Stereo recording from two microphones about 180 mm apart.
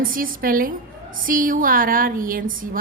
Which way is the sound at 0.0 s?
50° right (ahead or behind).